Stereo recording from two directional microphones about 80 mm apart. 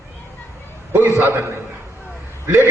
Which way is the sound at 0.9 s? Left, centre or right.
Right.